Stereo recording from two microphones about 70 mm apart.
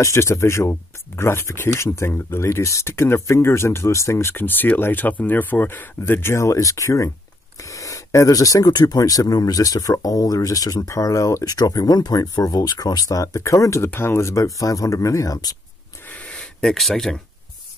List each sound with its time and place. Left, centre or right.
0.0 s speech: left
11.5 s speech: left
13.9 s speech: left
16.1 s a sound: centre
16.6 s speech: centre